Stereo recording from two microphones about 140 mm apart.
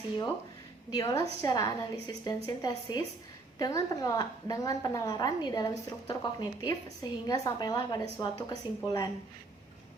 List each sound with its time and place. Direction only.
0.9 s a woman's voice: 25° left (ahead or behind)